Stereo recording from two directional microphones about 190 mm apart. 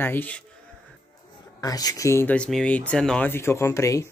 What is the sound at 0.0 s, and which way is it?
Speech, 10° left (ahead or behind).